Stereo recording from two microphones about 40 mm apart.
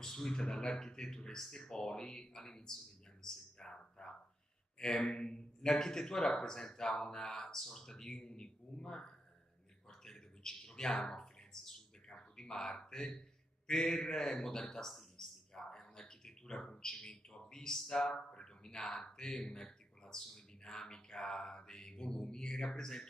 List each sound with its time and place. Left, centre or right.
0.0 s speech: centre
5.1 s speech: left
9.8 s bird: centre
13.7 s a man's voice: centre
15.1 s a sound: centre
17.7 s speech: centre